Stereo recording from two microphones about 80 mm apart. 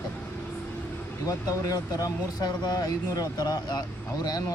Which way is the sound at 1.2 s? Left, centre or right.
Left.